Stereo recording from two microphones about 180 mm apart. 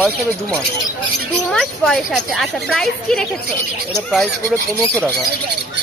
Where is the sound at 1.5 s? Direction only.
5° left (ahead or behind).